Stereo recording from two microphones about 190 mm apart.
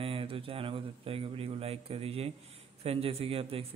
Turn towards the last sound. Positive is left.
turn(degrees=-30)  # may be behind; listen again after turning